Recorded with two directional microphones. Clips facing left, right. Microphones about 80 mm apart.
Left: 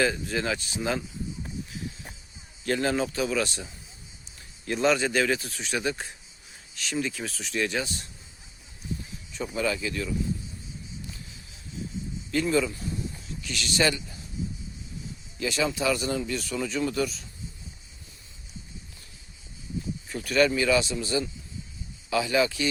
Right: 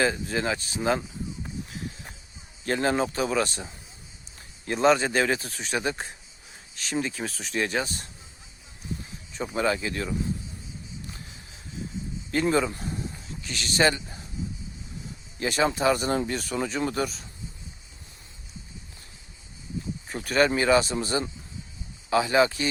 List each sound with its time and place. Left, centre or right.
0.0 s speech: right
2.6 s speech: right
9.3 s speech: right
12.3 s speech: right
15.4 s speech: right
20.1 s speech: right